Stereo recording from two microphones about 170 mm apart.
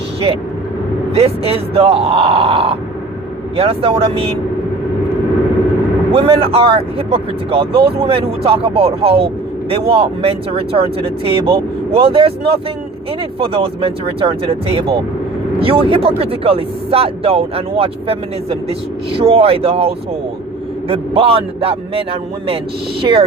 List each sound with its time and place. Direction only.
1.1 s speech: 35° right (ahead or behind)
6.1 s speech: 35° right (ahead or behind)